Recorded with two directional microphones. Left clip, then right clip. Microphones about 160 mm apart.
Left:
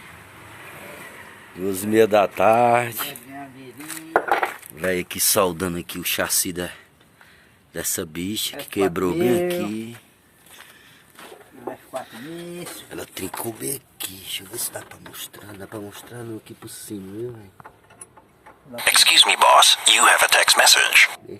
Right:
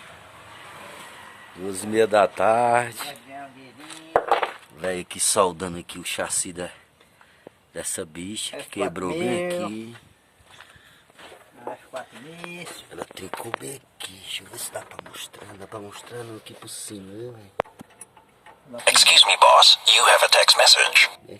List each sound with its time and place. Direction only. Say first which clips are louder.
1.5 s speech: left 4 dB; 5° right (ahead or behind)
4.8 s speech: left 4 dB; 5° right (ahead or behind)
13.1 s speech: left 1 dB; centre (ahead or behind)
18.9 s speech: even; 40° left (ahead or behind)